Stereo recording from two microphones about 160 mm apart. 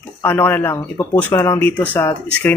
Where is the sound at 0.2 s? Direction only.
10° left (ahead or behind).